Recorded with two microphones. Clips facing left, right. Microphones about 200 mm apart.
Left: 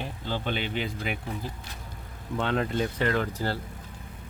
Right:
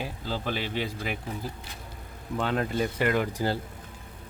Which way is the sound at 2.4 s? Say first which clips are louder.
Even; 5° right (ahead or behind).